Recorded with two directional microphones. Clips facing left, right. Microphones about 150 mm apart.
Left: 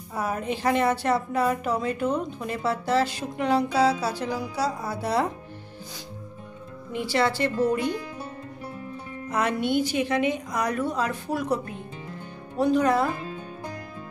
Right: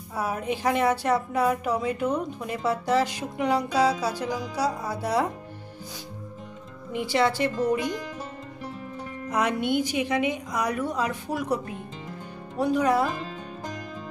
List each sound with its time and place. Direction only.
0.1 s a woman's voice: 10° right (ahead or behind)
6.9 s a woman's voice: 15° right (ahead or behind)
9.3 s a woman's voice: 15° right (ahead or behind)